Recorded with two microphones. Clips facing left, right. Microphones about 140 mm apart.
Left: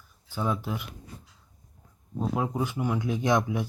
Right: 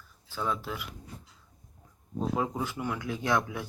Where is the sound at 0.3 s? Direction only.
15° left (ahead or behind).